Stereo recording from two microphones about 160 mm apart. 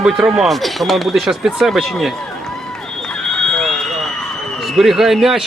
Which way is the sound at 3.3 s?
5° left (ahead or behind).